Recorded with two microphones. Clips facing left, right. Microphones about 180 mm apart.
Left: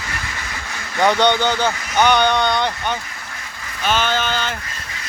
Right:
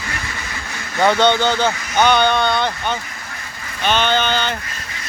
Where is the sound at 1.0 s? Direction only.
15° left (ahead or behind).